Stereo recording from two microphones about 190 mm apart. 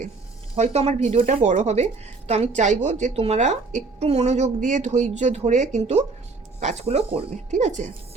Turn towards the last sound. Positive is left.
turn(degrees=-40)  # may be behind; listen again after turning